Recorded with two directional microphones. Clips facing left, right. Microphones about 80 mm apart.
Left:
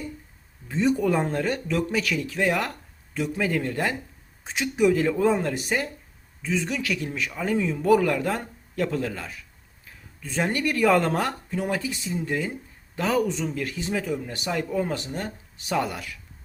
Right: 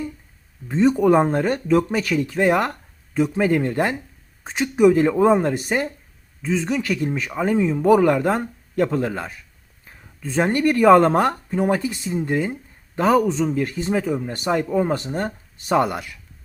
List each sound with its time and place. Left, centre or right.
0.7 s speech: right